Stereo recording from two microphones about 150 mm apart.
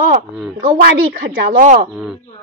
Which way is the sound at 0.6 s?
80° right.